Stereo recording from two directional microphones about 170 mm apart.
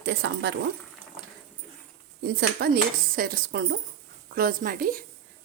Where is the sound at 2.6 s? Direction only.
70° right (ahead or behind).